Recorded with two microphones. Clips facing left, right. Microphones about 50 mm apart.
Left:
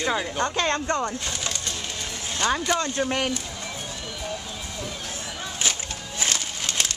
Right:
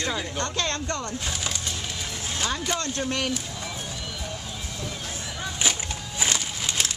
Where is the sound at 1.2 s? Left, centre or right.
Centre.